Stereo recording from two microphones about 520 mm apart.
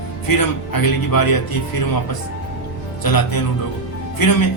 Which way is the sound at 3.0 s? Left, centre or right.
Left.